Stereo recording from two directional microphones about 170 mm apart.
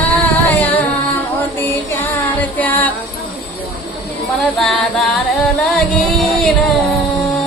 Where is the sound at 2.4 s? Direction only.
10° left (ahead or behind).